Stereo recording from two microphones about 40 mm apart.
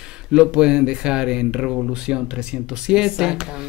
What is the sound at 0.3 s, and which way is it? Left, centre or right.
Speech, centre.